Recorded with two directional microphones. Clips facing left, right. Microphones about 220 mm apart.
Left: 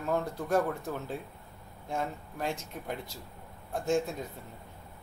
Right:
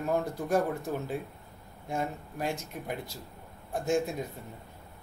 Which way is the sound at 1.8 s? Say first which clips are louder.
Right 1 dB; 10° right (ahead or behind).